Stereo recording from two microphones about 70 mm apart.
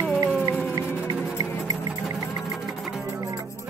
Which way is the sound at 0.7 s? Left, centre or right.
Right.